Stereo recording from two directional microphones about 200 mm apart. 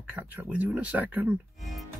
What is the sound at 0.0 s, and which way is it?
Speech, 5° right (ahead or behind).